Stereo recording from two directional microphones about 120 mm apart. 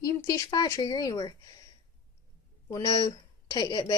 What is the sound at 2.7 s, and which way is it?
Speech, 30° left (ahead or behind).